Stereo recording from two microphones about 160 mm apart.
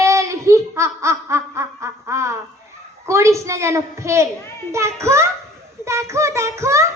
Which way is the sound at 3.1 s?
20° right (ahead or behind).